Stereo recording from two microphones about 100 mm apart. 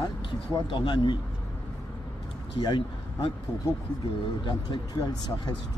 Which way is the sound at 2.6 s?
55° left (ahead or behind).